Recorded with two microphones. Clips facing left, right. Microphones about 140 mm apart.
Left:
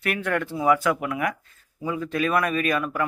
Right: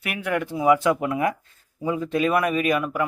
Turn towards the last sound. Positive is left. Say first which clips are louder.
# right 2 dB
turn(degrees=-20)  # may be behind; listen again after turning